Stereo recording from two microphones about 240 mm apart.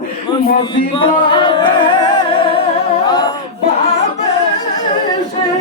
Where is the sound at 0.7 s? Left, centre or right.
Left.